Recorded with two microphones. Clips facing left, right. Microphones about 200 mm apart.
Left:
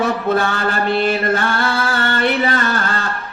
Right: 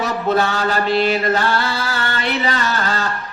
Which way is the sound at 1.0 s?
55° left (ahead or behind).